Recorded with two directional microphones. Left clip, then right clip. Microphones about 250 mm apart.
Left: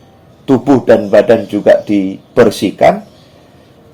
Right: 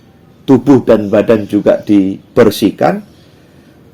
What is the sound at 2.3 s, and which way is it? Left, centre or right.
Speech, right.